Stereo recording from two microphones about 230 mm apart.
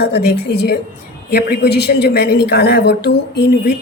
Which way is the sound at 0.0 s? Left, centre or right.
Left.